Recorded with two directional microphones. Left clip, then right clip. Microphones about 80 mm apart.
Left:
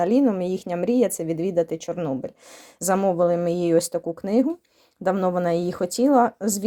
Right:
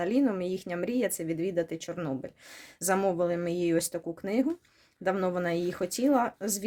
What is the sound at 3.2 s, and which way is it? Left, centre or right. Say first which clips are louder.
Speech: left 8 dB; left.